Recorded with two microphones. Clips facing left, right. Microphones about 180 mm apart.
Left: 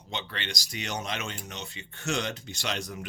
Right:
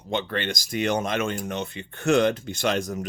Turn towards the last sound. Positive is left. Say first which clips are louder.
# right 9 dB
turn(degrees=-45)  # may be behind; listen again after turning